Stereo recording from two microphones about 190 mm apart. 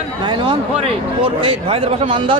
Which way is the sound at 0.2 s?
25° right (ahead or behind).